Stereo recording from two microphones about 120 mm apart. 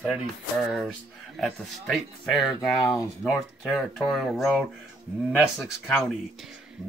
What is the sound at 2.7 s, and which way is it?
Speech, 30° left (ahead or behind).